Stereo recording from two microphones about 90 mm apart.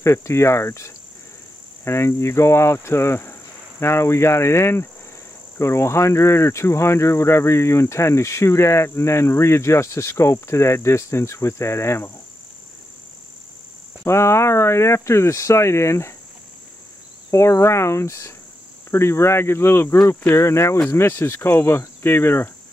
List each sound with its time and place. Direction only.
0.0 s speech: 30° left (ahead or behind)
1.9 s cricket: 30° left (ahead or behind)
5.6 s speech: 30° left (ahead or behind)
14.0 s speech: 30° left (ahead or behind)
17.3 s speech: 30° left (ahead or behind)
18.9 s cricket: 30° left (ahead or behind)
20.1 s speech: 30° left (ahead or behind)
20.9 s cricket: 30° left (ahead or behind)